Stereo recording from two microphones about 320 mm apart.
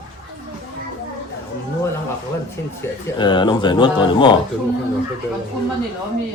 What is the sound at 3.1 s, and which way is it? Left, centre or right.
A man's voice, centre.